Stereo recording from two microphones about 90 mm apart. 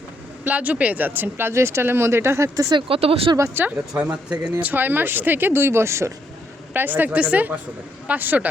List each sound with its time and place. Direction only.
0.4 s speech: 15° right (ahead or behind); by 2.7 s 35° right (ahead or behind)
2.7 s speech: 85° right
3.3 s speech: 25° right (ahead or behind)
6.7 s speech: 20° right (ahead or behind)